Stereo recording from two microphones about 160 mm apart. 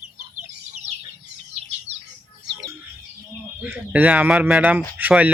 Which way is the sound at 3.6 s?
10° right (ahead or behind).